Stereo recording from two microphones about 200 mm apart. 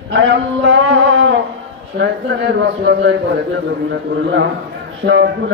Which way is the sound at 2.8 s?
60° right (ahead or behind).